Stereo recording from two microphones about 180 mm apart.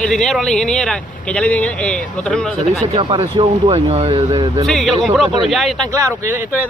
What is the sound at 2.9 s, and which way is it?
Speech, 25° right (ahead or behind).